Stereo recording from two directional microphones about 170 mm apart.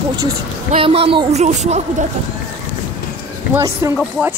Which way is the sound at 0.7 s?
35° right (ahead or behind).